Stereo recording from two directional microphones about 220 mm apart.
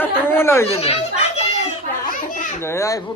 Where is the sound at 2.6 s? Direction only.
10° left (ahead or behind).